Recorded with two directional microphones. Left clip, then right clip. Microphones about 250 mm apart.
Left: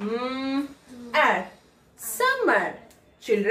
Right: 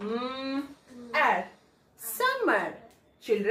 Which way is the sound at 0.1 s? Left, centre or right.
Centre.